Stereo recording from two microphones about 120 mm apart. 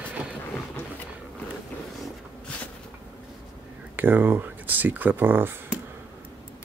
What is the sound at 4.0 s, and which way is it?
Speech, 15° right (ahead or behind).